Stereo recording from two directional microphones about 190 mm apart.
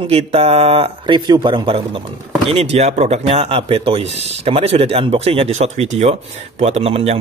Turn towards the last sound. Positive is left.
turn(degrees=-30)  # may be behind; listen again after turning